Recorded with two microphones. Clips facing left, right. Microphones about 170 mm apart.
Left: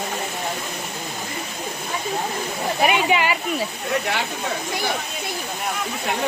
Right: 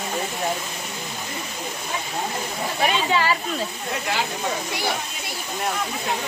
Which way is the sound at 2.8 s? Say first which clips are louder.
Left 2 dB; 15° left (ahead or behind).